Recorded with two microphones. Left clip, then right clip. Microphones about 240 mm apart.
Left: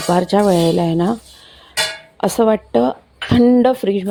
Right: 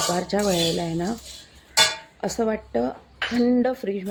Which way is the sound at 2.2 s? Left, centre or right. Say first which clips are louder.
Left 11 dB; left.